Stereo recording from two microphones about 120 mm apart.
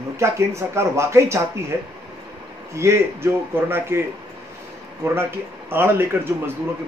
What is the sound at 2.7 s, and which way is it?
A man's voice, 25° right (ahead or behind).